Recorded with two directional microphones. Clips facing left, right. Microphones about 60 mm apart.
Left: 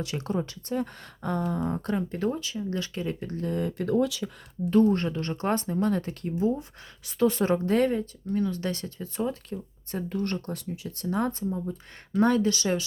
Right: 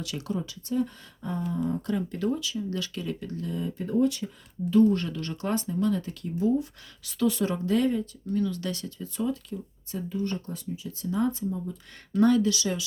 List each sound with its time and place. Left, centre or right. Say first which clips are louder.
0.0 s speech: left 2 dB; left
1.7 s speech: even; left
4.9 s speech: left 1 dB; left
6.4 s speech: right 2 dB; left
8.3 s speech: left 1 dB; left
9.5 s speech: left 1 dB; left
12.2 s speech: right 1 dB; left